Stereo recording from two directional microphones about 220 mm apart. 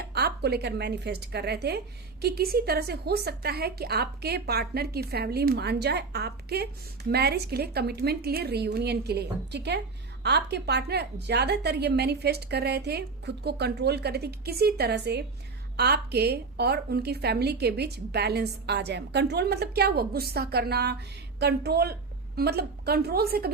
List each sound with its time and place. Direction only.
0.0 s a woman's voice: 45° right (ahead or behind)